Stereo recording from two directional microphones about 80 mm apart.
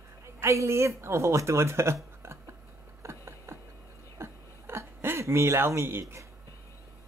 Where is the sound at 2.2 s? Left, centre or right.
Right.